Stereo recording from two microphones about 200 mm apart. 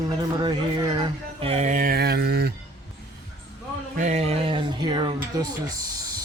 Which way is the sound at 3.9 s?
35° right (ahead or behind).